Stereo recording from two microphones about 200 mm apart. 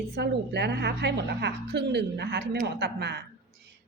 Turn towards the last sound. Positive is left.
turn(degrees=-60)  # may be behind; listen again after turning